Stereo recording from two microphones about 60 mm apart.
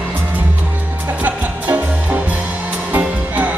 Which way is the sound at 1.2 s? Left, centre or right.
Right.